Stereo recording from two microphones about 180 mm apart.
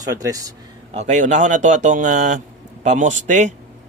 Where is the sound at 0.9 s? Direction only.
40° right (ahead or behind).